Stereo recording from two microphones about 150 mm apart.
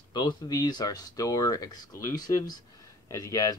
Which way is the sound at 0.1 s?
25° left (ahead or behind).